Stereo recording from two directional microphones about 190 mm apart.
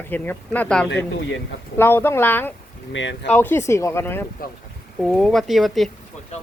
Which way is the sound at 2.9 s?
75° left (ahead or behind).